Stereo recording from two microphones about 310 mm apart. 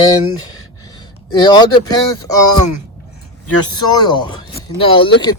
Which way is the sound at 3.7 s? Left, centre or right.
Centre.